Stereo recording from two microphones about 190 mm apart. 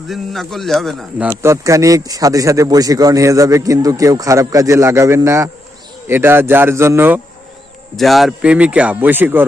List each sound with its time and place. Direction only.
0.1 s speech: centre (ahead or behind)
1.3 s speech: 15° right (ahead or behind)
7.9 s speech: centre (ahead or behind)